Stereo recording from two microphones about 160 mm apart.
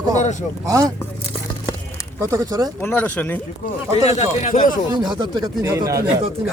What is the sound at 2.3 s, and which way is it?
Speech, 20° right (ahead or behind).